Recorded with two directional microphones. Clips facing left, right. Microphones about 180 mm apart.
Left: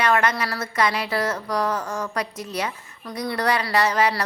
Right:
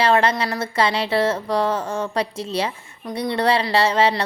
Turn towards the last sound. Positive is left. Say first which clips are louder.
# right 3 dB
turn(degrees=-25)  # may be behind; listen again after turning